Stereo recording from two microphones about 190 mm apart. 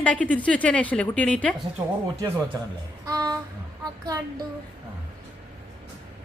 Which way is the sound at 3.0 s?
20° right (ahead or behind).